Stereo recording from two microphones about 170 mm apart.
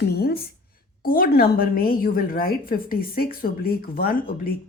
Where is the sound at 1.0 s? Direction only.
60° left (ahead or behind).